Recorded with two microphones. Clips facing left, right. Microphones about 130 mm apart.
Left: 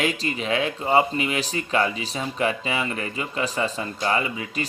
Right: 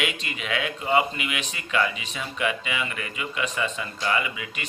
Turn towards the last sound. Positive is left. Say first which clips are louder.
# left 3 dB
turn(degrees=35)  # may be behind; listen again after turning